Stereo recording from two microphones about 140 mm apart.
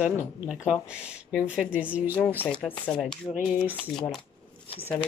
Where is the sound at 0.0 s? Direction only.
10° right (ahead or behind).